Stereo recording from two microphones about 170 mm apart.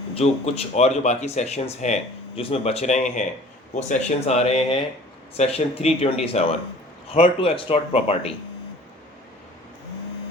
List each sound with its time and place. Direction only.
0.1 s speech: 35° left (ahead or behind)